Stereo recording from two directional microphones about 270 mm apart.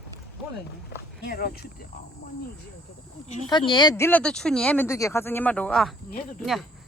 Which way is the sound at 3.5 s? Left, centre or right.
Centre.